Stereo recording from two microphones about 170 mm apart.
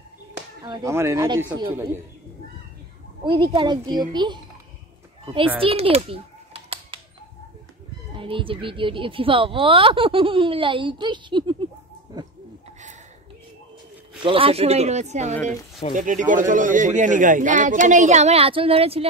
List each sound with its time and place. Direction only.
0.6 s speech: 25° right (ahead or behind)
3.5 s a child's voice: 25° right (ahead or behind)
5.6 s typing: 35° right (ahead or behind)
8.2 s a woman's voice: 30° right (ahead or behind)
14.2 s a woman's voice: 30° right (ahead or behind)